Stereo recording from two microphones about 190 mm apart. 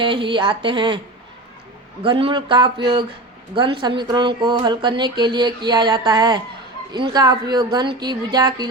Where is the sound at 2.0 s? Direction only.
25° right (ahead or behind).